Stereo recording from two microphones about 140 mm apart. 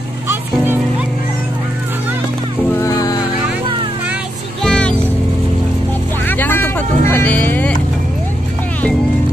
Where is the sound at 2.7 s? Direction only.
25° left (ahead or behind).